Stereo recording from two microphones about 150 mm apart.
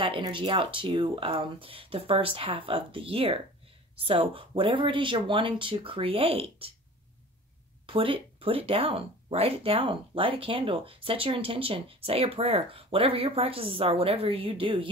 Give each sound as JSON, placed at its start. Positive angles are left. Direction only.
{"t": 0.0, "sound": "speech", "side_deg": -35}
{"t": 7.8, "sound": "speech", "side_deg": -35}